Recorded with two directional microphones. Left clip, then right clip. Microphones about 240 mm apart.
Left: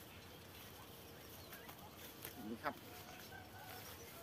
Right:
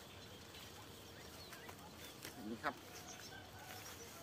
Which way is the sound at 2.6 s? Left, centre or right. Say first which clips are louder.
Right 1 dB; centre.